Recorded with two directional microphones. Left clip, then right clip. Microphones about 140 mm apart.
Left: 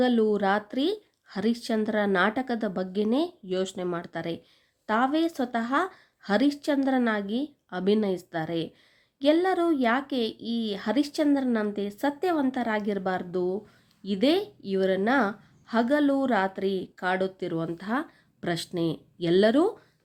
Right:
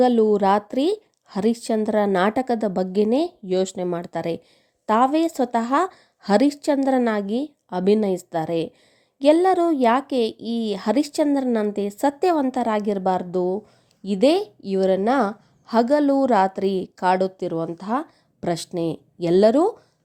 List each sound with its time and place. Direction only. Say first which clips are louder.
0.0 s speech: right 7 dB; 40° right (ahead or behind)